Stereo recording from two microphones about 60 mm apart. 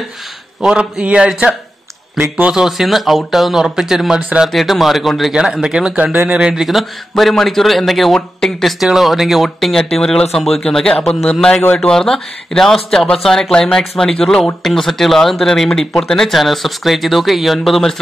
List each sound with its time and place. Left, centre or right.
0.6 s speech: centre
2.5 s speech: centre
4.5 s a man's voice: centre
5.3 s a man's voice: centre
8.7 s a man's voice: centre